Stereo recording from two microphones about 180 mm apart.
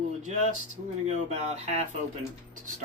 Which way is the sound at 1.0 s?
40° right (ahead or behind).